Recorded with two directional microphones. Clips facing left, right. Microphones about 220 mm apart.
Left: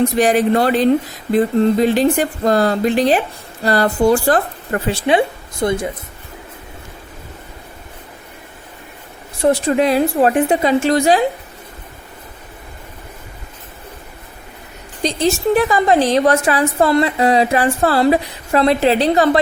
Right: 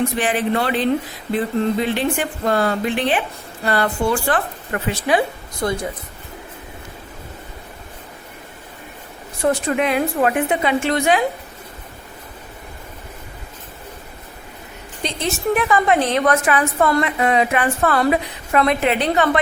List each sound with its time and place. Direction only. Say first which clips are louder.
0.2 s a woman's voice: left 6 dB; 40° left (ahead or behind)
5.0 s speech: left 3 dB; 25° left (ahead or behind)
9.4 s a woman's voice: left 4 dB; 30° left (ahead or behind)
15.0 s a woman's voice: left 6 dB; 35° left (ahead or behind)